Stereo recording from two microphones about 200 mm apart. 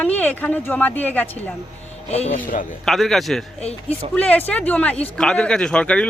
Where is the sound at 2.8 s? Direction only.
Centre (ahead or behind).